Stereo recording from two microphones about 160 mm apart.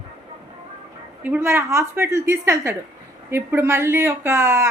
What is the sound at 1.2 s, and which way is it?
A woman's voice, 15° right (ahead or behind).